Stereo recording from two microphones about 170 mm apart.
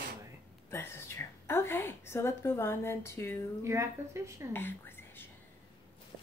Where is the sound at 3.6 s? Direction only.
15° right (ahead or behind).